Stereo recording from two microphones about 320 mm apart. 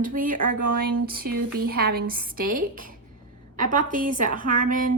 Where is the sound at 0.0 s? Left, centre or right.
Right.